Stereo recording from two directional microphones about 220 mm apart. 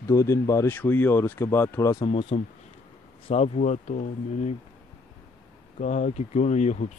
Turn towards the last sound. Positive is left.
turn(degrees=30)  # may be behind; listen again after turning